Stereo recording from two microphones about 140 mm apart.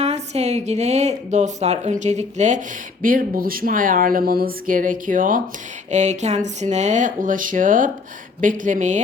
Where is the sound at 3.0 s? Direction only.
85° right.